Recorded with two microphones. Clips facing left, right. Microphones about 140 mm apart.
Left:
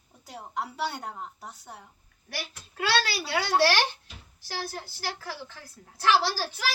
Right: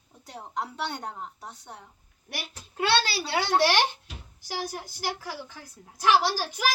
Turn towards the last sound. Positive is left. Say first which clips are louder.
# right 3 dB
turn(degrees=-15)  # may be behind; listen again after turning